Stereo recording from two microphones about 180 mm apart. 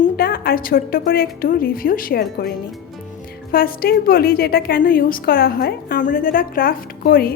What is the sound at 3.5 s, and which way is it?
A woman's voice, 55° left (ahead or behind).